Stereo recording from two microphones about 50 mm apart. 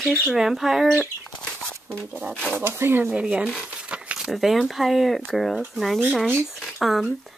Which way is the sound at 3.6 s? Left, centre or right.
Right.